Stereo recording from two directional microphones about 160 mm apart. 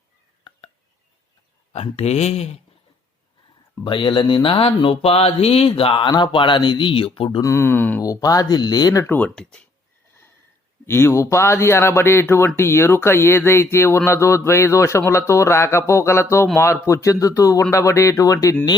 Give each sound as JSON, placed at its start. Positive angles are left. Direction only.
{"t": 1.7, "sound": "speech", "side_deg": 40}
{"t": 3.8, "sound": "speech", "side_deg": 30}
{"t": 7.4, "sound": "speech", "side_deg": 15}
{"t": 8.0, "sound": "speech", "side_deg": 20}
{"t": 10.8, "sound": "speech", "side_deg": 15}